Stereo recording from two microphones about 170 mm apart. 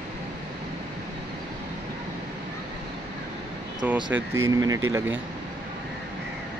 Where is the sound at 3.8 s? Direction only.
10° right (ahead or behind).